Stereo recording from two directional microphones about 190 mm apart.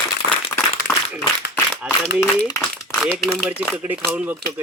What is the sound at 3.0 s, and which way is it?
Speech, 5° left (ahead or behind).